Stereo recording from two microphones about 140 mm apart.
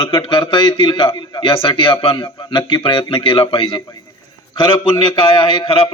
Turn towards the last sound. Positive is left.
turn(degrees=40)  # may be behind; listen again after turning